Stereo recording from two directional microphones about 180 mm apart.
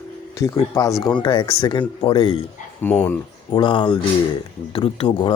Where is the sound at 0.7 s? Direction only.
15° left (ahead or behind).